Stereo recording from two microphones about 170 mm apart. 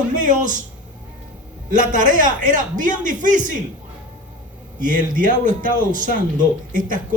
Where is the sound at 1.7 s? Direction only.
50° right (ahead or behind).